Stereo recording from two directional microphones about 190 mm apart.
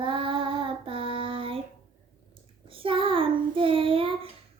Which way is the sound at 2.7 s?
30° right (ahead or behind).